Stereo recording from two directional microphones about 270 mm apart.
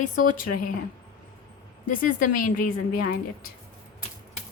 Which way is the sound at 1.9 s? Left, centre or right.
Left.